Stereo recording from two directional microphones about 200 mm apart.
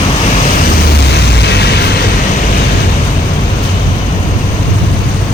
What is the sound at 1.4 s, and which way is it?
Vehicle, 55° left (ahead or behind).